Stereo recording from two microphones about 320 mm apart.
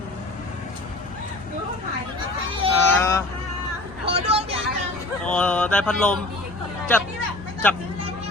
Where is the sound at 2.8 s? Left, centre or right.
Centre.